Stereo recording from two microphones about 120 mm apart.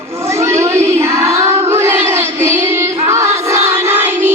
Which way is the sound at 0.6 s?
25° right (ahead or behind).